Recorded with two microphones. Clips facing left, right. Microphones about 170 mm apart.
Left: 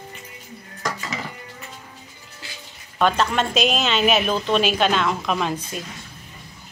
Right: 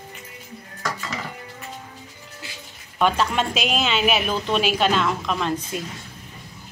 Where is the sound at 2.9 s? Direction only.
10° right (ahead or behind).